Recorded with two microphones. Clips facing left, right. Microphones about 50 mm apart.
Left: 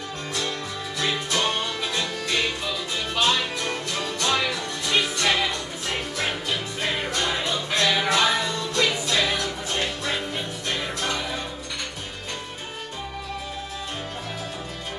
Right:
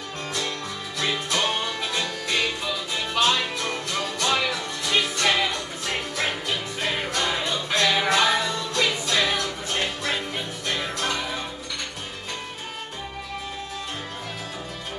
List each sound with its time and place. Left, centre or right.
0.9 s music: centre